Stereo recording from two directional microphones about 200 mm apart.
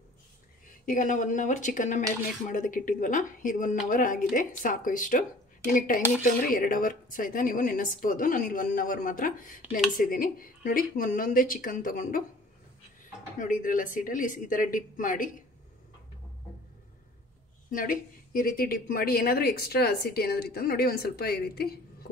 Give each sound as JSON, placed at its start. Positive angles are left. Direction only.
{"t": 0.8, "sound": "a woman's voice", "side_deg": 40}
{"t": 13.4, "sound": "speech", "side_deg": 40}
{"t": 17.6, "sound": "a woman's voice", "side_deg": 45}